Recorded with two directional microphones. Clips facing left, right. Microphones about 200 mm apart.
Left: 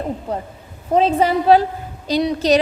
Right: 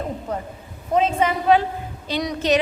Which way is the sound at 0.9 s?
35° left (ahead or behind).